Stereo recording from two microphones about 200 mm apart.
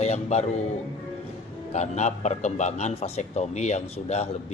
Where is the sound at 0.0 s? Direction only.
35° left (ahead or behind).